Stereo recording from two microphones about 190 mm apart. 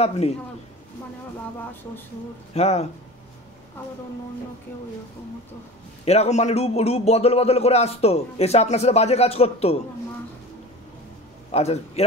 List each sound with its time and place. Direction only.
2.5 s a man's voice: 35° left (ahead or behind)
6.0 s a man's voice: 35° left (ahead or behind)
11.5 s a man's voice: 35° left (ahead or behind)